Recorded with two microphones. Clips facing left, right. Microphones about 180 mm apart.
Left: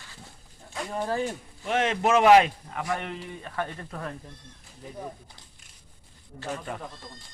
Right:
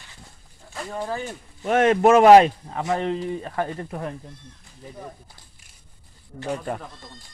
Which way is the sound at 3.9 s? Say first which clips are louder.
Right 5 dB; 20° right (ahead or behind).